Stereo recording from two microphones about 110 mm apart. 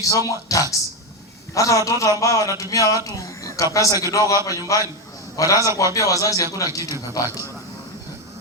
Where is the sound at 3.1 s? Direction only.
30° left (ahead or behind).